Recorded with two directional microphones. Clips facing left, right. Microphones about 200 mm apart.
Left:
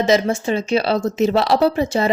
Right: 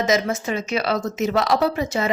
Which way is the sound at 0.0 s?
30° left (ahead or behind).